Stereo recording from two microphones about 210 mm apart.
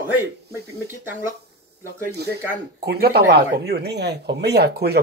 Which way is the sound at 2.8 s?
50° right (ahead or behind).